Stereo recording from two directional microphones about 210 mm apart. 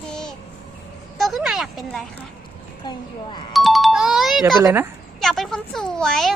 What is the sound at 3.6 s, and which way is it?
Music, centre (ahead or behind).